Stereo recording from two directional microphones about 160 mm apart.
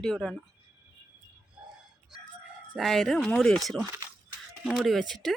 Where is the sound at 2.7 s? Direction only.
Centre (ahead or behind).